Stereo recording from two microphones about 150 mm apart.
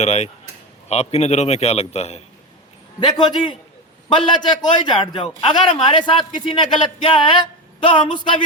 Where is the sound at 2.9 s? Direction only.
30° left (ahead or behind).